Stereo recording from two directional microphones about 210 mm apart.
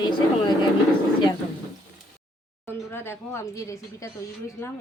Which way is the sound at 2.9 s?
10° left (ahead or behind).